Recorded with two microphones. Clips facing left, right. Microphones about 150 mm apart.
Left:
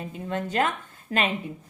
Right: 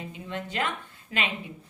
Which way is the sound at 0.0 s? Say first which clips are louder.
Left 5 dB; 45° left (ahead or behind).